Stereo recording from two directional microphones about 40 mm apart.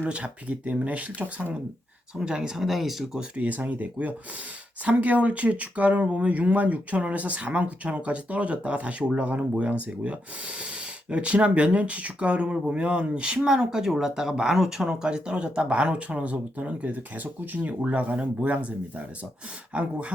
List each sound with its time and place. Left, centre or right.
0.1 s speech: right
2.1 s speech: right
2.6 s speech: centre
3.3 s speech: right
13.4 s speech: centre; by 17.7 s right
17.7 s speech: right